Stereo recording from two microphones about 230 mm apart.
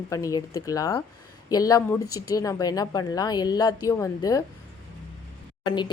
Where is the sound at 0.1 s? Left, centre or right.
Centre.